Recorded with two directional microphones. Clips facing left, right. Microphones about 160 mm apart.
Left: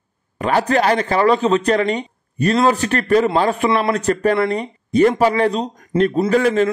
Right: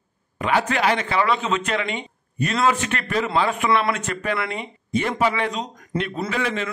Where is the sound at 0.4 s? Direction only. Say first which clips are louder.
Left 5 dB; 40° left (ahead or behind).